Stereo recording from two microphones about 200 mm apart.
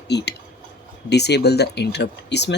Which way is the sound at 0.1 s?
55° left (ahead or behind).